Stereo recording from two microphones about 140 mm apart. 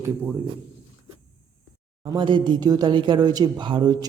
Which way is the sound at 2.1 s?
35° right (ahead or behind).